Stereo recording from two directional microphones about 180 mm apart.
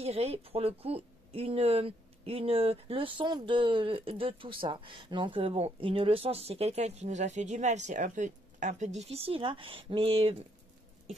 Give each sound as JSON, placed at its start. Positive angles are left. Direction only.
{"t": 0.0, "sound": "speech", "side_deg": -35}